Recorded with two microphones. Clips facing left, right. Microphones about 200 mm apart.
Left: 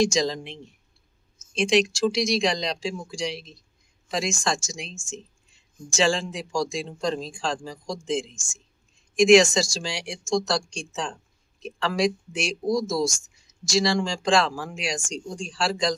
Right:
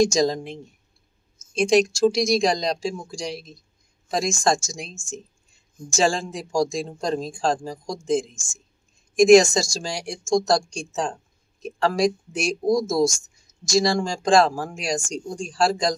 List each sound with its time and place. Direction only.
0.0 s speech: 45° right (ahead or behind)